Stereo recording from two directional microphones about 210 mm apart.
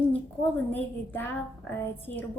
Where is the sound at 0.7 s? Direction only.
10° left (ahead or behind).